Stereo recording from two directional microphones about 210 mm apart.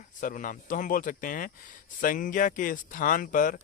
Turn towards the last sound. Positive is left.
turn(degrees=40)  # may be behind; listen again after turning